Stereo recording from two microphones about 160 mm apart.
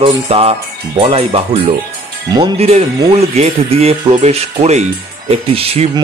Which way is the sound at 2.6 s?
40° right (ahead or behind).